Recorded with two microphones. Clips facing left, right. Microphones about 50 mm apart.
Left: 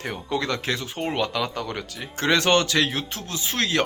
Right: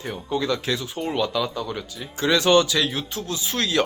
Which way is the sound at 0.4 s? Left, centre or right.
Left.